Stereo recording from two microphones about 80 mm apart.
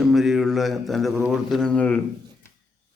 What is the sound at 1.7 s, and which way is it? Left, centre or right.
Speech, centre.